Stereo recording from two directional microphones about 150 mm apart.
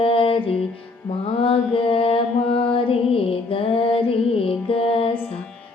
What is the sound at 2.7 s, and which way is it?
Music, 40° left (ahead or behind).